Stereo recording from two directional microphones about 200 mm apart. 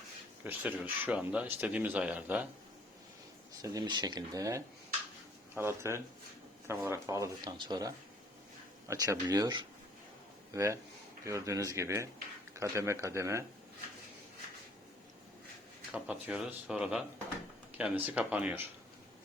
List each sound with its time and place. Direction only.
0.4 s speech: 10° right (ahead or behind)
3.6 s speech: 15° right (ahead or behind)
15.9 s speech: 5° right (ahead or behind)